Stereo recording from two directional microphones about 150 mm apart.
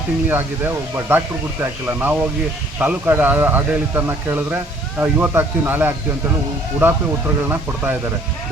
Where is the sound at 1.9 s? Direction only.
10° right (ahead or behind).